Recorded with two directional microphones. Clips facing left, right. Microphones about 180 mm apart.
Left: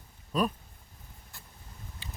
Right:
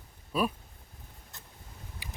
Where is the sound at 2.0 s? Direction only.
15° right (ahead or behind).